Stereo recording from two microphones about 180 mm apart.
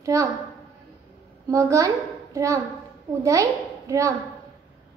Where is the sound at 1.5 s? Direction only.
15° right (ahead or behind).